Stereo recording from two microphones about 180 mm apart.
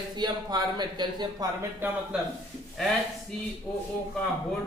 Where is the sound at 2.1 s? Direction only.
5° right (ahead or behind).